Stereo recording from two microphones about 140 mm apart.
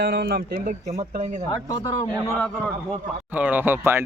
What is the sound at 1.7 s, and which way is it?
Speech, 25° left (ahead or behind).